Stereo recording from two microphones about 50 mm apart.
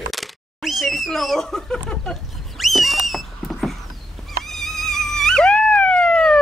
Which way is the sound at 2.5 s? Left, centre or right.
Centre.